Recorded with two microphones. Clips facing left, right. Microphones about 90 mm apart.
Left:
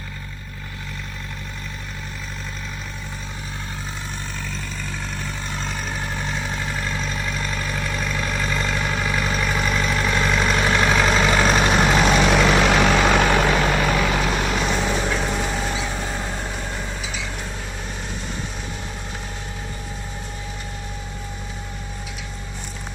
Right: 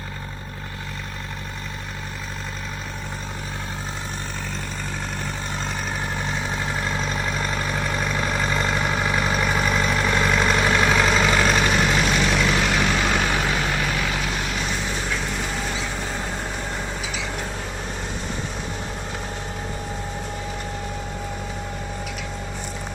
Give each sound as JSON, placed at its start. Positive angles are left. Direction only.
{"t": 6.0, "sound": "vehicle", "side_deg": -15}
{"t": 11.6, "sound": "vehicle", "side_deg": 30}
{"t": 12.0, "sound": "vehicle", "side_deg": 60}